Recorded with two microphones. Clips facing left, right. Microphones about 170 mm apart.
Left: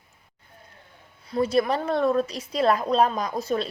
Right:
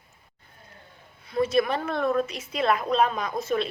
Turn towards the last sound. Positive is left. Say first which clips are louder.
# left 1 dB
turn(degrees=35)  # may be behind; listen again after turning